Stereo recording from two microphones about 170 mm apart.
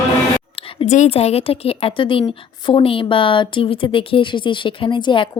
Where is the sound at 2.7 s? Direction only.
30° left (ahead or behind).